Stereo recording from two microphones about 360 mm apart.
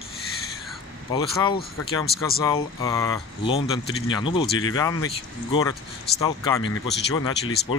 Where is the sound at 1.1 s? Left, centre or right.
Centre.